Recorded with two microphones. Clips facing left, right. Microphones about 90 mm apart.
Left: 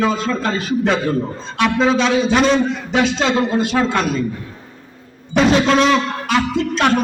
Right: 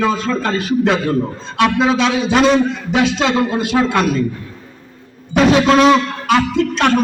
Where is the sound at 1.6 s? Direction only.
5° right (ahead or behind).